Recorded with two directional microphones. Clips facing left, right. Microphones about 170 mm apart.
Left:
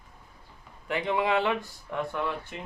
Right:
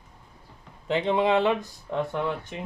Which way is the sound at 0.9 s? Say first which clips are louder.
Right 4 dB; 25° right (ahead or behind).